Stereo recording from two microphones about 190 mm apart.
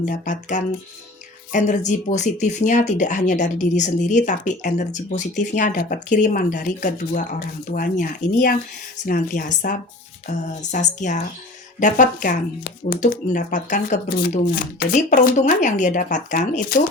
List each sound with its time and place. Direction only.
0.0 s speech: 40° left (ahead or behind)